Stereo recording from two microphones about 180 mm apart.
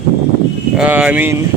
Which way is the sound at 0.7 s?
5° right (ahead or behind).